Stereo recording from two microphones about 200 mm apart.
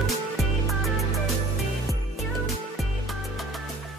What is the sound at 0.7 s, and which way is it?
Music, centre (ahead or behind).